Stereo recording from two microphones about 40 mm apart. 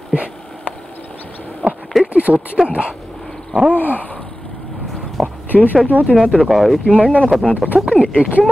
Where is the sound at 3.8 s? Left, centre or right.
Left.